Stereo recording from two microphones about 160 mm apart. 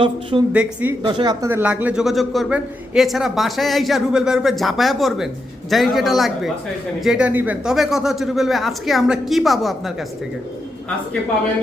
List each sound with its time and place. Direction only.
0.0 s speech: 30° right (ahead or behind)
0.5 s speech: 10° right (ahead or behind)
1.0 s speech: 25° right (ahead or behind)
1.5 s a man's voice: 10° right (ahead or behind)